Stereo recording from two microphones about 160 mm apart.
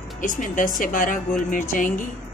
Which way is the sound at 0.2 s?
55° left (ahead or behind).